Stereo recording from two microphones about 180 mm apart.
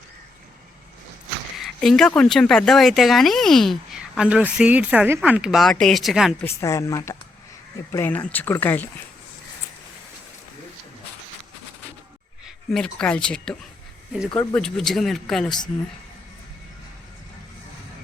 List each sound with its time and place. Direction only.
1.5 s speech: centre (ahead or behind)
6.4 s speech: 15° left (ahead or behind)
12.7 s speech: 5° left (ahead or behind)